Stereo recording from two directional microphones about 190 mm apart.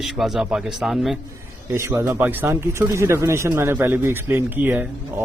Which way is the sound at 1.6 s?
15° right (ahead or behind).